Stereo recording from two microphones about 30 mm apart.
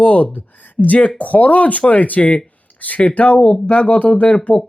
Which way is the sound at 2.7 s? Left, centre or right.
Left.